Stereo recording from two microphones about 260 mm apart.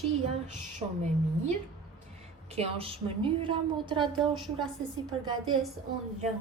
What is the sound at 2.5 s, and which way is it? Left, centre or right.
A woman's voice, right.